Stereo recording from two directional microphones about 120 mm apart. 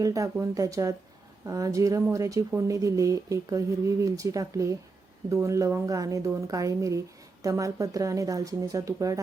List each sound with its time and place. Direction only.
0.0 s speech: 30° right (ahead or behind)